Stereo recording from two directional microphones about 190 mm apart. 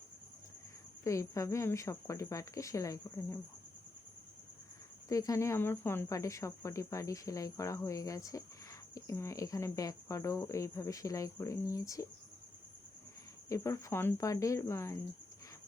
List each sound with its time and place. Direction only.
1.0 s speech: 15° left (ahead or behind)
5.0 s speech: 15° left (ahead or behind)
13.5 s speech: 15° left (ahead or behind)